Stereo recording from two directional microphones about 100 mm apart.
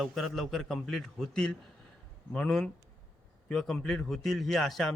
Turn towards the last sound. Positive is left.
turn(degrees=5)  # may be behind; listen again after turning